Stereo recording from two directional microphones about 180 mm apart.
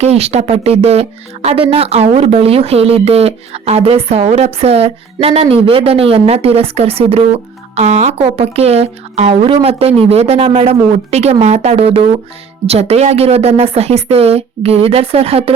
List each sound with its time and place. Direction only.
0.0 s speech: 35° right (ahead or behind)